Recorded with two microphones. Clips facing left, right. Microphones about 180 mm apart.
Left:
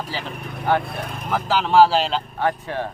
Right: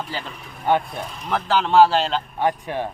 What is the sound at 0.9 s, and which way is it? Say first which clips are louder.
Speech: left 2 dB; 60° left (ahead or behind).